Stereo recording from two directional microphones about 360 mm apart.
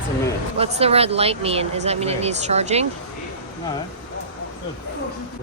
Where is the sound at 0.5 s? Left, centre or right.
Centre.